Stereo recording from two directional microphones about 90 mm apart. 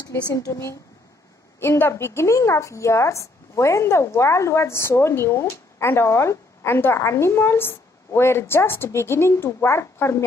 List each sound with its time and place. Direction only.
0.1 s a woman's voice: 35° left (ahead or behind)